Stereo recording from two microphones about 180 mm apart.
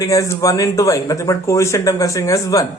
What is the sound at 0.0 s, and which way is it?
Speech, 20° left (ahead or behind).